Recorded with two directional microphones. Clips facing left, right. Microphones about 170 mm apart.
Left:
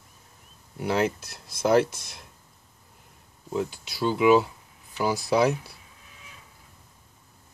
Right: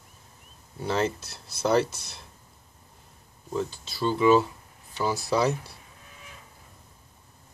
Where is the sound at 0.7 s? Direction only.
10° left (ahead or behind).